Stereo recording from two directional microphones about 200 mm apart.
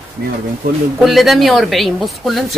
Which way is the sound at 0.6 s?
45° right (ahead or behind).